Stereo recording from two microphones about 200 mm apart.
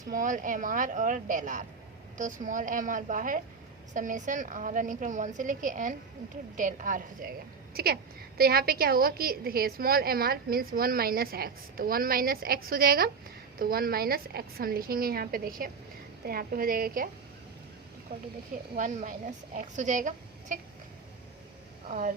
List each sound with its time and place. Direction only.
0.1 s a woman's voice: 40° right (ahead or behind)
18.8 s a woman's voice: 40° right (ahead or behind)
21.8 s speech: 40° right (ahead or behind)